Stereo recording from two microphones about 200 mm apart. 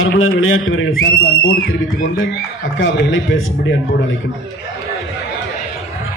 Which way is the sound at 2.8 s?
70° left (ahead or behind).